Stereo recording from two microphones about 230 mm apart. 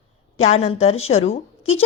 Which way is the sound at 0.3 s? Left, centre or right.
Left.